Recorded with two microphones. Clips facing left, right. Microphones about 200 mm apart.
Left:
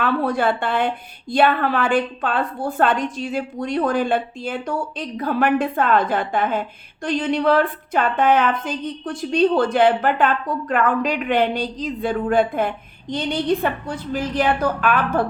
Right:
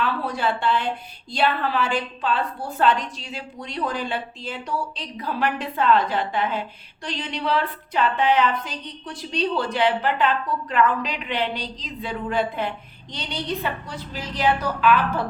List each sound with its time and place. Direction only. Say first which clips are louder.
0.0 s a woman's voice: left 5 dB; 55° left (ahead or behind)